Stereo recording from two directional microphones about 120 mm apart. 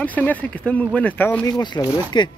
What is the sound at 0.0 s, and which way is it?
Speech, 15° left (ahead or behind).